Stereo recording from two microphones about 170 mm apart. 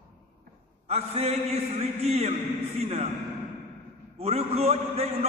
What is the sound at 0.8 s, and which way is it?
A man's voice, 40° right (ahead or behind).